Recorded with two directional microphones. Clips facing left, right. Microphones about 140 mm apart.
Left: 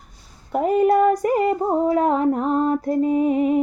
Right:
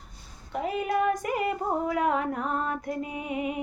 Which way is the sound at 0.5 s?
45° left (ahead or behind).